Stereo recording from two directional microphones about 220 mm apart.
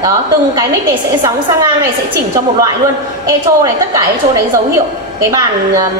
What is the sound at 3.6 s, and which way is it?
A woman's voice, 15° right (ahead or behind).